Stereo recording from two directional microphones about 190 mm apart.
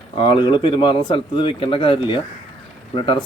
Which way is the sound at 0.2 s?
25° left (ahead or behind).